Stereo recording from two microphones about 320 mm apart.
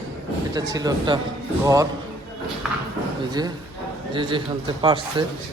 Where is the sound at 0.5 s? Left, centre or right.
Centre.